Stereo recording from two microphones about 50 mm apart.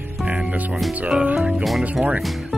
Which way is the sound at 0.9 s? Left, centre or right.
Right.